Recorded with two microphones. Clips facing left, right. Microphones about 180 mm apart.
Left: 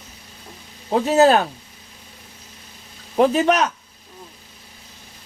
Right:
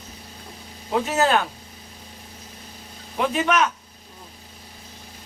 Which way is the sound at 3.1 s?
35° left (ahead or behind).